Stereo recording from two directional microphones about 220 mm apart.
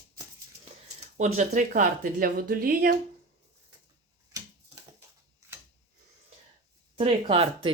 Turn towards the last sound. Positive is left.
turn(degrees=-25)  # may be behind; listen again after turning